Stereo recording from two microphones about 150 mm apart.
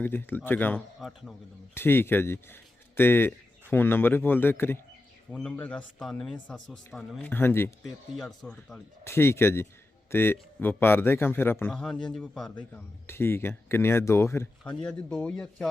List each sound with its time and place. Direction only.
0.0 s speech: 15° left (ahead or behind)
0.9 s speech: centre (ahead or behind)
1.7 s speech: 15° left (ahead or behind)
7.2 s speech: 15° left (ahead or behind)
7.9 s speech: centre (ahead or behind)
9.0 s speech: 15° left (ahead or behind)
11.7 s speech: 5° left (ahead or behind)
14.8 s speech: 5° left (ahead or behind)